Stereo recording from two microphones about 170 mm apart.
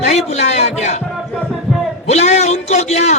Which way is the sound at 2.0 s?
40° left (ahead or behind).